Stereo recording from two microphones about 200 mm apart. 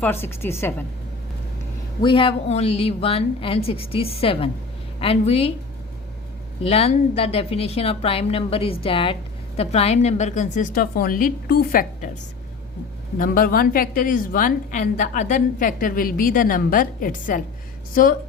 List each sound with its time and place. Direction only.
0.0 s a woman's voice: 10° left (ahead or behind)
2.0 s a woman's voice: 25° left (ahead or behind)
6.6 s a woman's voice: 30° left (ahead or behind); by 12.1 s 45° left (ahead or behind)
13.1 s a woman's voice: 45° left (ahead or behind)